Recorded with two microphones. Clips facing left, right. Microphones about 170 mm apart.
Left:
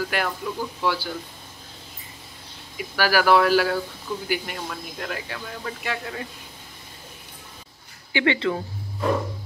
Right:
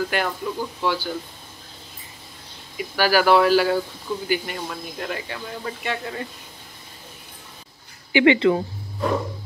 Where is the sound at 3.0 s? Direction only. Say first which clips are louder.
Right 2 dB; centre (ahead or behind).